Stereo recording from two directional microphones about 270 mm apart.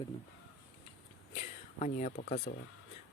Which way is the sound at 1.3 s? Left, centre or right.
Left.